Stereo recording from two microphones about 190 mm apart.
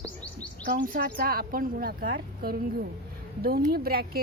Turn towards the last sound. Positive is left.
turn(degrees=-50)  # may be behind; listen again after turning